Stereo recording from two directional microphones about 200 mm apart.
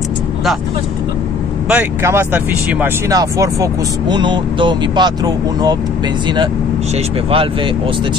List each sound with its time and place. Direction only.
1.7 s speech: 10° right (ahead or behind); by 7.7 s 25° right (ahead or behind)